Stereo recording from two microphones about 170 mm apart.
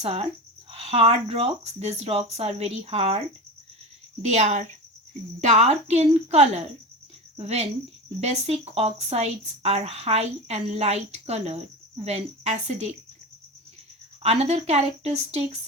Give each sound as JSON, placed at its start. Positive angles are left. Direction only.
{"t": 0.0, "sound": "a woman's voice", "side_deg": -35}
{"t": 4.2, "sound": "a woman's voice", "side_deg": -40}
{"t": 14.2, "sound": "a woman's voice", "side_deg": -40}